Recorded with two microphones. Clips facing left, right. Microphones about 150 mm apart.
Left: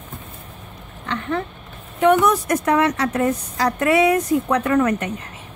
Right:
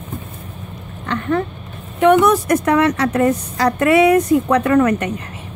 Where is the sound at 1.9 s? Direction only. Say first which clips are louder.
Right 4 dB; 80° right.